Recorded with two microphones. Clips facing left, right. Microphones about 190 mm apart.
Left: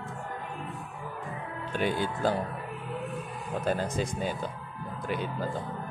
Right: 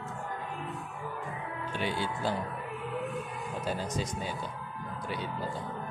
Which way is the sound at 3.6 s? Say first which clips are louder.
Left 5 dB; 55° left (ahead or behind).